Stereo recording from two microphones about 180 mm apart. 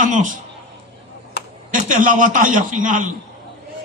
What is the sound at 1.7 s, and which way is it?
A man's voice, 45° right (ahead or behind).